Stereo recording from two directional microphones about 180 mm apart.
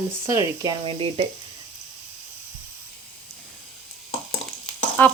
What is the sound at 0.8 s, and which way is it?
Speech, 30° right (ahead or behind).